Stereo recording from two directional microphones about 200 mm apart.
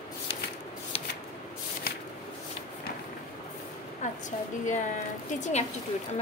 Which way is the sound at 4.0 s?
40° left (ahead or behind).